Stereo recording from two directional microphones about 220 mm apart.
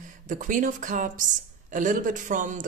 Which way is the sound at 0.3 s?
35° right (ahead or behind).